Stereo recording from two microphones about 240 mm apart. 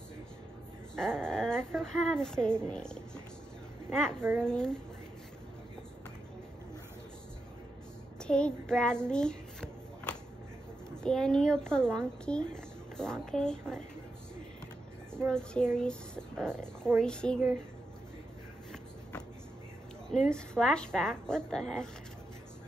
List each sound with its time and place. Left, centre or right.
0.9 s speech: centre
4.4 s speech: centre
8.2 s child singing: centre
9.1 s a sound: centre
11.0 s speech: centre
15.2 s speech: centre
20.1 s speech: centre